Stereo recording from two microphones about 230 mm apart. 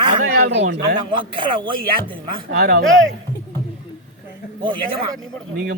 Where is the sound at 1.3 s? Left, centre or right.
Right.